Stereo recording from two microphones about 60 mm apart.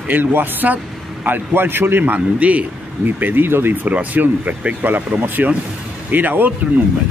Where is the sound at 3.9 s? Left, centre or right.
Right.